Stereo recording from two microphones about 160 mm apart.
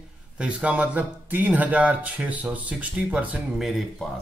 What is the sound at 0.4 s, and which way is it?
Speech, 5° right (ahead or behind).